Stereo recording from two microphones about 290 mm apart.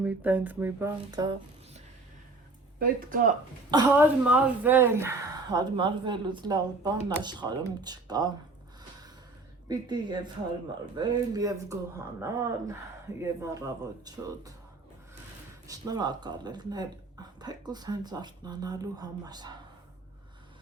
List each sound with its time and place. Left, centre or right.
0.0 s speech: centre
2.7 s speech: right
3.7 s speech: centre
9.6 s speech: centre
15.6 s speech: centre